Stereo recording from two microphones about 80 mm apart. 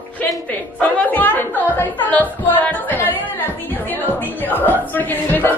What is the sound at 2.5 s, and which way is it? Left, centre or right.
Music, left.